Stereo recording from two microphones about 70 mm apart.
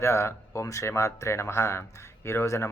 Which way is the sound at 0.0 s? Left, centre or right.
Left.